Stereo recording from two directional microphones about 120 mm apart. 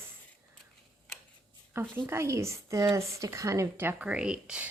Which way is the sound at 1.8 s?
20° right (ahead or behind).